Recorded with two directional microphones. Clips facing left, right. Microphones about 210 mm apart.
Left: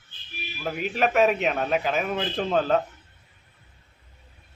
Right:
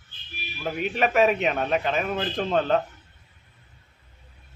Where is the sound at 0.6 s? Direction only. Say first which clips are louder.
Even; centre (ahead or behind).